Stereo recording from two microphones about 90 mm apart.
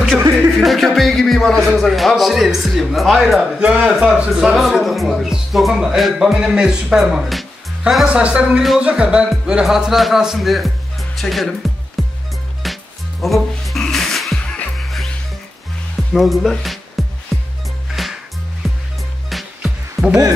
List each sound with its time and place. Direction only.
0.6 s speech: centre (ahead or behind)
3.9 s music: 10° right (ahead or behind)
4.3 s speech: 5° right (ahead or behind)
8.1 s music: 10° right (ahead or behind)
8.6 s speech: 10° right (ahead or behind)
12.0 s music: centre (ahead or behind)
16.1 s speech: centre (ahead or behind)
17.3 s music: centre (ahead or behind)